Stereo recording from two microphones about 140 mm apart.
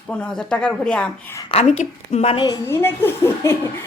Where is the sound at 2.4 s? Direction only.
20° left (ahead or behind).